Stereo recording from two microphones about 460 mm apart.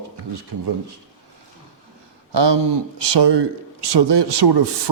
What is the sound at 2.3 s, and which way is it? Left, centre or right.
Speech, right.